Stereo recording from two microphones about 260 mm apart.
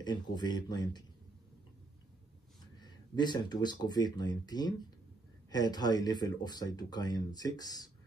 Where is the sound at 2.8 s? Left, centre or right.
Centre.